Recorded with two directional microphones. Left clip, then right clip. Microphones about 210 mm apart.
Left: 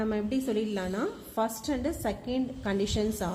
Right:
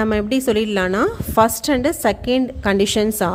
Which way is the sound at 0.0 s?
45° right (ahead or behind).